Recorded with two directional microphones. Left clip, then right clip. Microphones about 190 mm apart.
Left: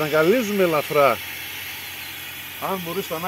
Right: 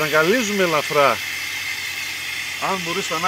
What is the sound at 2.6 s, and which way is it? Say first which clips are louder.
Speech: right 3 dB; 15° right (ahead or behind).